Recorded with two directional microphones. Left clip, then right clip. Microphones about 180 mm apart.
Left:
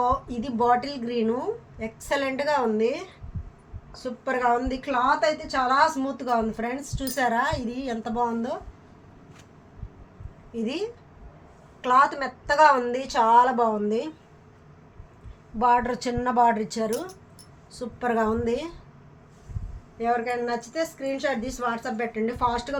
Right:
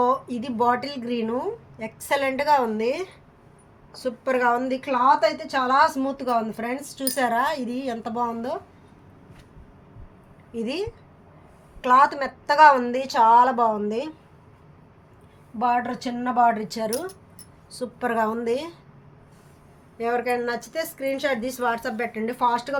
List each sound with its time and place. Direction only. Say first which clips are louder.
0.0 s a woman's voice: right 2 dB; 35° right (ahead or behind)
10.5 s a woman's voice: right 1 dB; 35° right (ahead or behind)
15.5 s a woman's voice: left 2 dB; 15° right (ahead or behind); by 18.7 s 35° right (ahead or behind)
20.0 s a woman's voice: right 1 dB; 60° right (ahead or behind); by 22.8 s 40° right (ahead or behind)